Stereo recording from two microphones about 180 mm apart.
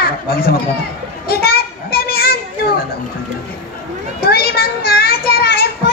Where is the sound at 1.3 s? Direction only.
60° left (ahead or behind).